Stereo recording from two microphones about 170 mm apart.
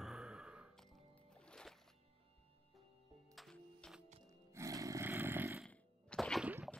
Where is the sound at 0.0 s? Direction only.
Centre (ahead or behind).